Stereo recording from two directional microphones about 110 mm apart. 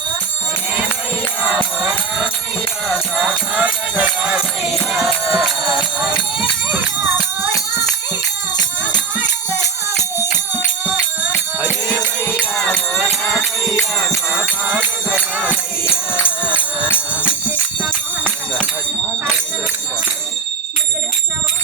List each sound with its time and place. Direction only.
1.5 s music: 5° right (ahead or behind)
11.9 s music: 15° right (ahead or behind)
12.5 s music: 10° left (ahead or behind)
16.1 s music: 15° left (ahead or behind)